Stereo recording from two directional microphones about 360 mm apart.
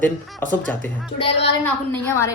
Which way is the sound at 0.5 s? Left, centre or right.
Centre.